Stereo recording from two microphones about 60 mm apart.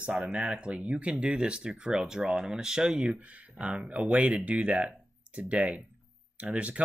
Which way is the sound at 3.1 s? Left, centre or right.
Right.